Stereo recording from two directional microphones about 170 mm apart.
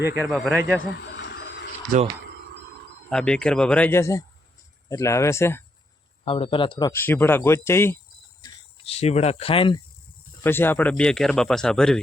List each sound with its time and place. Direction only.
0.3 s speech: centre (ahead or behind)
1.1 s a sound: 90° left
1.9 s speech: 50° right (ahead or behind)
3.1 s speech: 5° left (ahead or behind)
6.2 s speech: 35° left (ahead or behind)
6.9 s speech: 10° left (ahead or behind)
8.8 s speech: 35° left (ahead or behind)
10.4 s speech: 10° left (ahead or behind)